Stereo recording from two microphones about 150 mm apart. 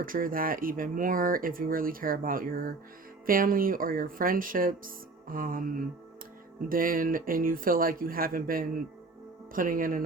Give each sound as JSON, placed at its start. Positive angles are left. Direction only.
{"t": 0.0, "sound": "speech", "side_deg": -70}